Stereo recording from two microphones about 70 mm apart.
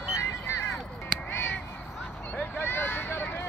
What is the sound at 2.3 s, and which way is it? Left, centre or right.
Vehicle, left.